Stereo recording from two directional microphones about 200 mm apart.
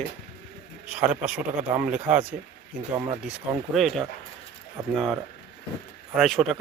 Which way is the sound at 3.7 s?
Centre (ahead or behind).